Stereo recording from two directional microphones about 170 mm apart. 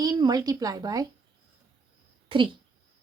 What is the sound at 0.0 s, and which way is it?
Speech, 20° right (ahead or behind).